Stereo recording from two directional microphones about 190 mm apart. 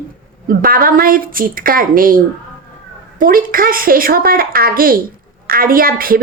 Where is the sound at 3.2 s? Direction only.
50° right (ahead or behind).